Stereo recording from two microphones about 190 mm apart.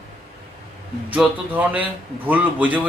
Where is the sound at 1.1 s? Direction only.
5° right (ahead or behind).